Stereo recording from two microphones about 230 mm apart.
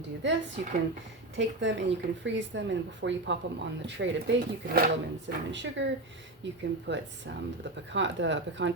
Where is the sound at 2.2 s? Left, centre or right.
Right.